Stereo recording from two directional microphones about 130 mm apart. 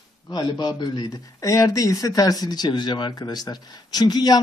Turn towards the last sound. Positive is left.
turn(degrees=30)  # may be behind; listen again after turning